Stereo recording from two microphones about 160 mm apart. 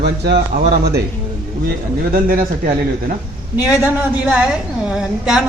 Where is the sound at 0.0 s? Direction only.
90° right.